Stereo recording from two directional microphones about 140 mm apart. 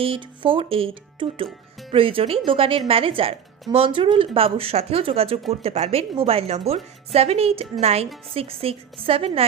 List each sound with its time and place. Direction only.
0.0 s speech: 40° right (ahead or behind)